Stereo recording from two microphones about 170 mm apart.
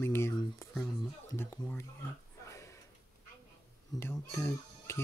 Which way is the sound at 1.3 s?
15° left (ahead or behind).